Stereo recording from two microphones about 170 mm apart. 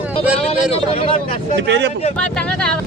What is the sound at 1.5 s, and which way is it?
Speech, 90° right.